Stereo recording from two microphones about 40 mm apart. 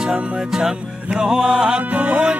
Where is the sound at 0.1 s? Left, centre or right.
Centre.